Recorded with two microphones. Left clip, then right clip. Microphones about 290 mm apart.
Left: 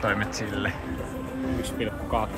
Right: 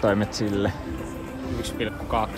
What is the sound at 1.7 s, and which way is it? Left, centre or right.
Speech, centre.